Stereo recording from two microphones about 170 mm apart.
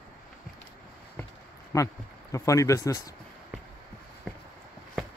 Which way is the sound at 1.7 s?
20° left (ahead or behind).